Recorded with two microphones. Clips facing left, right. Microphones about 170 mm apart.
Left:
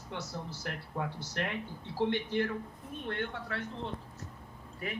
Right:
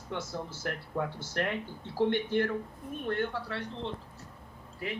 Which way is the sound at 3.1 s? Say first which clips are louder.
Right 5 dB; 40° right (ahead or behind).